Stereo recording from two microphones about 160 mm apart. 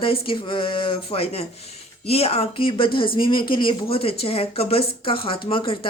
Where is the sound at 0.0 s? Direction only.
35° left (ahead or behind).